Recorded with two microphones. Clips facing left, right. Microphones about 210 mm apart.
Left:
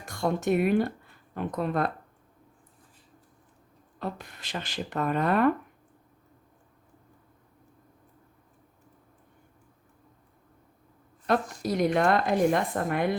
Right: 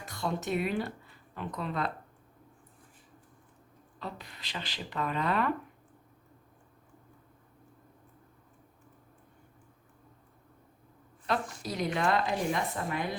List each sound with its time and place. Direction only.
0.0 s speech: 50° left (ahead or behind)
4.0 s speech: 50° left (ahead or behind)
11.6 s a woman's voice: 55° left (ahead or behind)